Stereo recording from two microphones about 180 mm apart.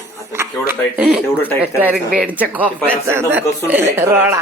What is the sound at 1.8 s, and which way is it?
Speech, 10° right (ahead or behind).